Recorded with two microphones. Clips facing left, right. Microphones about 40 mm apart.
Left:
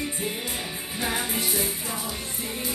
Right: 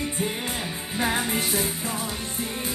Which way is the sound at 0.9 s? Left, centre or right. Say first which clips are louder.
Right 4 dB; right.